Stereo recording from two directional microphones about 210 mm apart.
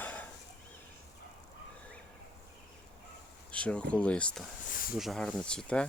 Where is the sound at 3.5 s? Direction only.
5° left (ahead or behind).